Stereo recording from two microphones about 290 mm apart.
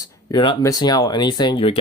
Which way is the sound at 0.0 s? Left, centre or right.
Centre.